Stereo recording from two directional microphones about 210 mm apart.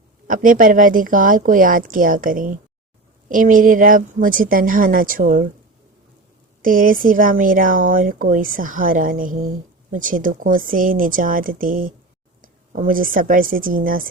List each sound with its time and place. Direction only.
0.3 s speech: 40° right (ahead or behind)
6.6 s a woman's voice: 40° right (ahead or behind)